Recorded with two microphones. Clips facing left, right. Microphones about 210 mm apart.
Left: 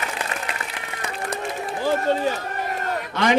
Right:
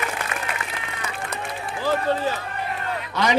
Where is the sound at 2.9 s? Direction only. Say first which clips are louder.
Left 2 dB; 50° left (ahead or behind).